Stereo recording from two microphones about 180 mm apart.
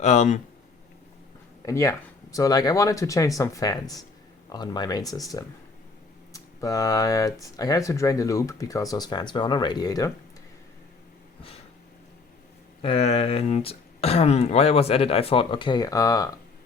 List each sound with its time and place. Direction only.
0.0 s speech: 40° left (ahead or behind)
1.6 s speech: 15° left (ahead or behind)
12.8 s speech: 35° left (ahead or behind)